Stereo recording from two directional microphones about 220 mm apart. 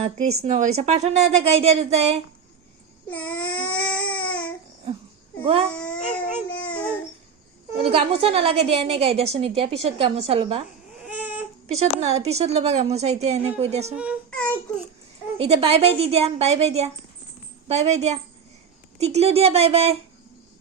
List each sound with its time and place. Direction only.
0.4 s a woman's voice: 30° right (ahead or behind)
3.1 s baby cry: 5° left (ahead or behind)
5.4 s baby cry: 25° right (ahead or behind)
5.7 s speech: 5° left (ahead or behind)
6.5 s a sound: 5° left (ahead or behind)
7.8 s a woman's voice: 25° right (ahead or behind)
11.0 s baby cry: 5° right (ahead or behind)
11.8 s a woman's voice: 30° right (ahead or behind)
13.9 s a child's voice: 5° right (ahead or behind)
15.4 s a woman's voice: 25° right (ahead or behind)